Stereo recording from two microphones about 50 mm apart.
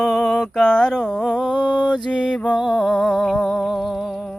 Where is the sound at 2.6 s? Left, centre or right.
Centre.